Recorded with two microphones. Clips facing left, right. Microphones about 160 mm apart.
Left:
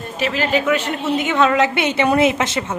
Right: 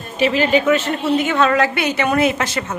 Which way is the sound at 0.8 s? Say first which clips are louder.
Right 2 dB; 15° left (ahead or behind).